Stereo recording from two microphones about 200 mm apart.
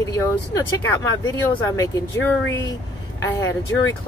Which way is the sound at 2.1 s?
10° left (ahead or behind).